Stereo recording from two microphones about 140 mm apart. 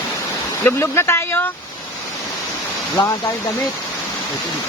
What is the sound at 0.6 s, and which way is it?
Speech, 15° left (ahead or behind).